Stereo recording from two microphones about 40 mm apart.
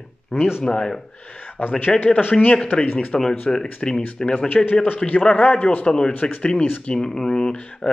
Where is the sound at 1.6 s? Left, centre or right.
Left.